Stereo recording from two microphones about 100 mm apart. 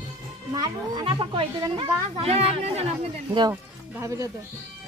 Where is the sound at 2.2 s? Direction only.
85° right.